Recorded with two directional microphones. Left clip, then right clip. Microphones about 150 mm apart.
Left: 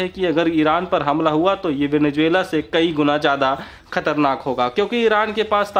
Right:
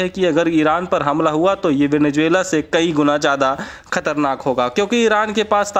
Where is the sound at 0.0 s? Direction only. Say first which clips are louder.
Right 3 dB; 35° right (ahead or behind).